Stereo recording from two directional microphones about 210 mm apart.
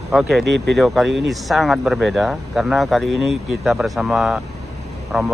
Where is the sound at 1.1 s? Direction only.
55° right (ahead or behind).